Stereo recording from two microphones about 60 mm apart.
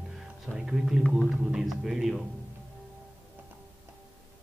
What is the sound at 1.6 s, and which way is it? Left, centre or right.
Speech, centre.